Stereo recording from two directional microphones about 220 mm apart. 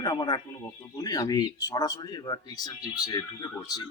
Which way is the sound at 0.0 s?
20° left (ahead or behind).